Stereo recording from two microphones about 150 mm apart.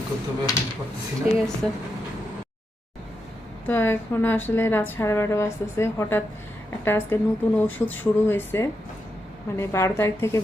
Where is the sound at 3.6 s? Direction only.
15° left (ahead or behind).